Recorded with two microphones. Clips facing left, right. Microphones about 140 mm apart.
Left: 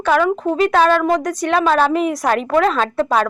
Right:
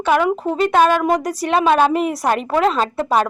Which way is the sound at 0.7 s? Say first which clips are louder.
Right 1 dB; 15° right (ahead or behind).